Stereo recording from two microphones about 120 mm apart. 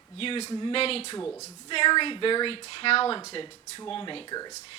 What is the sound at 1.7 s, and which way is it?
Speech, 45° left (ahead or behind).